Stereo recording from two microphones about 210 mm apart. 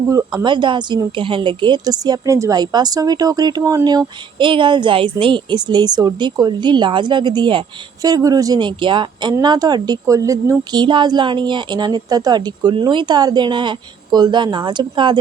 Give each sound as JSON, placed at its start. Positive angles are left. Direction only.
{"t": 0.1, "sound": "a woman's voice", "side_deg": -15}